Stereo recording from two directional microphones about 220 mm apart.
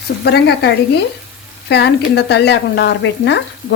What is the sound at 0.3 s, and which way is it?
Speech, 50° left (ahead or behind).